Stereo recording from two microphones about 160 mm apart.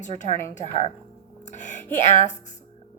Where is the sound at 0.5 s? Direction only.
40° left (ahead or behind).